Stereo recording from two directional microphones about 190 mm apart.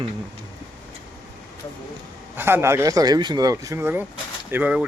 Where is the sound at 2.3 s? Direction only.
10° right (ahead or behind).